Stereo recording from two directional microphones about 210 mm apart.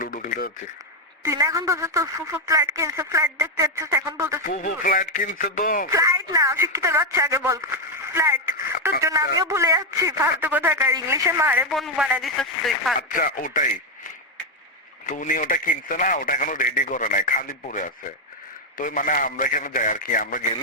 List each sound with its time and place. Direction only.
0.0 s a sound: 40° left (ahead or behind)
1.2 s a man's voice: 15° right (ahead or behind)
4.4 s speech: 40° left (ahead or behind)
5.9 s a man's voice: 15° right (ahead or behind)
13.0 s speech: 40° left (ahead or behind)
15.0 s speech: 40° left (ahead or behind)